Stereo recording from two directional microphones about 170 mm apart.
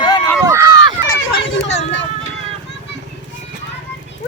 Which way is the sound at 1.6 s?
90° left.